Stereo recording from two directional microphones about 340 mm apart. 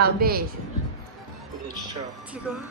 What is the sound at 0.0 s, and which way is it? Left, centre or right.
Child singing, right.